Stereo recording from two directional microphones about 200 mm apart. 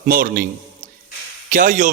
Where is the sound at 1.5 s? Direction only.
40° right (ahead or behind).